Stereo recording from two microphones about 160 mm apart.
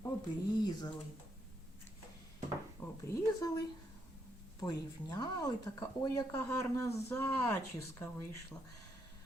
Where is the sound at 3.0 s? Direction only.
15° left (ahead or behind).